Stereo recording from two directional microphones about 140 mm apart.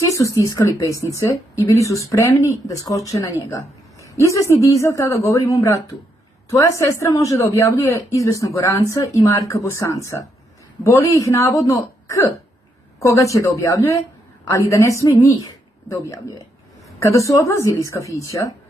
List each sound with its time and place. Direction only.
0.0 s speech: 25° left (ahead or behind)